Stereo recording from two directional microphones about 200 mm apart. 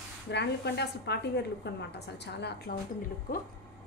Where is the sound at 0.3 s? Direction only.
55° left (ahead or behind).